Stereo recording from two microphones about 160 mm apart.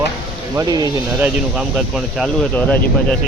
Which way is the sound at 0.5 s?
25° right (ahead or behind).